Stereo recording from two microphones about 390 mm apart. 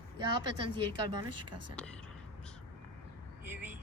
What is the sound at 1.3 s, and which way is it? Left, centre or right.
Speech, right.